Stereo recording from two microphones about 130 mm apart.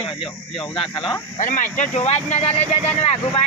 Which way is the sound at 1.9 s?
55° left (ahead or behind).